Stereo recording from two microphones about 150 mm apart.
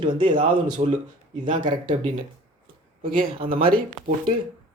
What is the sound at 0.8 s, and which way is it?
Speech, 45° right (ahead or behind).